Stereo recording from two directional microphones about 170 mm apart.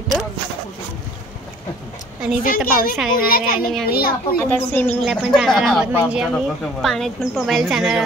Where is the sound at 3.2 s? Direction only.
60° left (ahead or behind).